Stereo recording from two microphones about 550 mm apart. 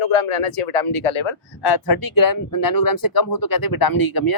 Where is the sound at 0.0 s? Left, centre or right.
Left.